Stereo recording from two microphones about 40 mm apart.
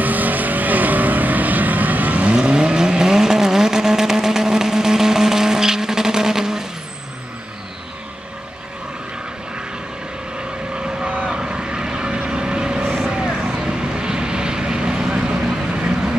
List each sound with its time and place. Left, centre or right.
0.0 s vehicle: right
2.3 s vehicle: right
11.3 s vehicle: right